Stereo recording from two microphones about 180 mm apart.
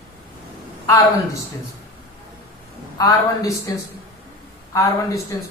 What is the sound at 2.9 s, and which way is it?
Speech, 20° left (ahead or behind).